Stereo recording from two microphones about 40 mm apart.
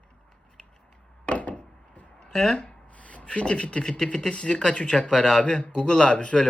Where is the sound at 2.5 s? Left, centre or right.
Left.